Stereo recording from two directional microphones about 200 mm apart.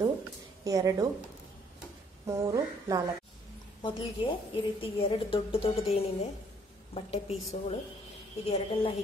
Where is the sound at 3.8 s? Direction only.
25° left (ahead or behind).